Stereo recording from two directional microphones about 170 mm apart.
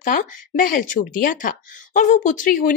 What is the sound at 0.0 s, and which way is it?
Speech, 50° left (ahead or behind).